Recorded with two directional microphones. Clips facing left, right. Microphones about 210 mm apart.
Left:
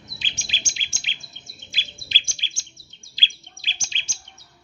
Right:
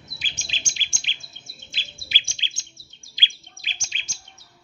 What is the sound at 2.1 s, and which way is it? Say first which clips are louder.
Chirp: right 2 dB; 20° right (ahead or behind).